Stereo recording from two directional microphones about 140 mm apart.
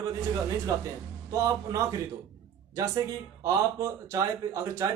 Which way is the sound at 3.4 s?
25° right (ahead or behind).